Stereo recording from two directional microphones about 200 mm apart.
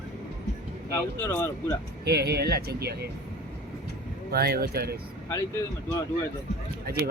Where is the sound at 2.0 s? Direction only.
55° right (ahead or behind).